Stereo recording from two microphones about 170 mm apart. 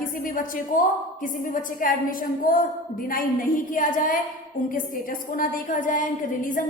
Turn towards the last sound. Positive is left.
turn(degrees=50)  # may be behind; listen again after turning